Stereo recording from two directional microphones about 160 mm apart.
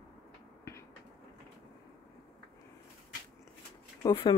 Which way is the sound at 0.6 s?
15° left (ahead or behind).